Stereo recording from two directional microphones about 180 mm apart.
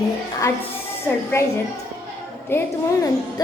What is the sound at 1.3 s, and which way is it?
Speech, 15° left (ahead or behind).